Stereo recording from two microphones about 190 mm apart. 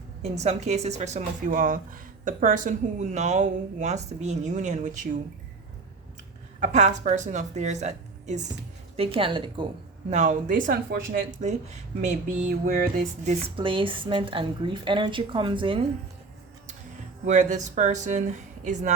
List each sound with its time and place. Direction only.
0.2 s speech: 35° right (ahead or behind)
6.6 s a woman's voice: 40° right (ahead or behind)
10.1 s speech: 40° right (ahead or behind)
12.5 s music: 45° right (ahead or behind)
13.6 s a woman's voice: 25° right (ahead or behind)
17.2 s speech: 40° right (ahead or behind)